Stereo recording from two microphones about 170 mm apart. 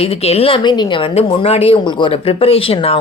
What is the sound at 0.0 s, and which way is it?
A woman's voice, 35° left (ahead or behind).